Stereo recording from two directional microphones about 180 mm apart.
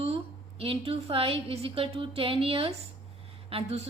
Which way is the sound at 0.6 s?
30° right (ahead or behind).